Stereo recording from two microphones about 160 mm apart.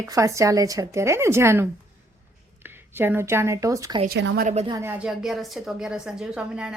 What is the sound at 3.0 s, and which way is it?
A woman's voice, 15° right (ahead or behind).